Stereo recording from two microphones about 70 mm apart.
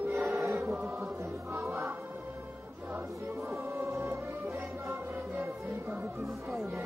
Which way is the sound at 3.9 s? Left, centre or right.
Right.